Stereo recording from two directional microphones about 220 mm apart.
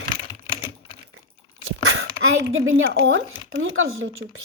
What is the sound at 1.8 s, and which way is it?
A woman's voice, 65° right (ahead or behind).